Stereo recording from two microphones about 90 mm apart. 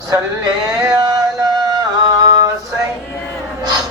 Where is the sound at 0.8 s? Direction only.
45° right (ahead or behind).